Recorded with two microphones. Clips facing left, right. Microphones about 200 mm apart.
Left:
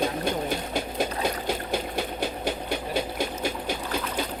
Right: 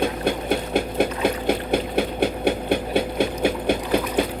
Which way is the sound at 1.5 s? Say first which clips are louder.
Right 7 dB; 60° right (ahead or behind).